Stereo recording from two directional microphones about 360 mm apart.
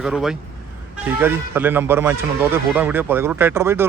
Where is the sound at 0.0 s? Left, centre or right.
Centre.